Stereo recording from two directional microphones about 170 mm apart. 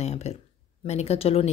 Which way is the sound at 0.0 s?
40° left (ahead or behind).